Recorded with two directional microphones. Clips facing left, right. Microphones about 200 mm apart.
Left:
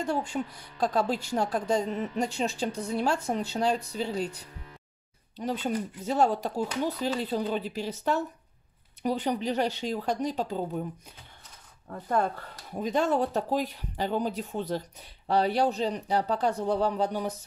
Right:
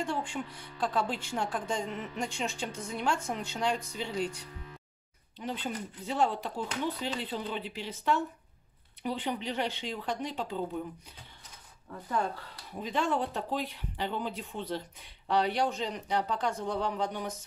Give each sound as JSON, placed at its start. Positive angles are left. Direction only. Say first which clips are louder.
{"t": 0.0, "sound": "speech", "louder": "left 4 dB", "side_deg": 40}
{"t": 11.9, "sound": "speech", "louder": "left 5 dB", "side_deg": 50}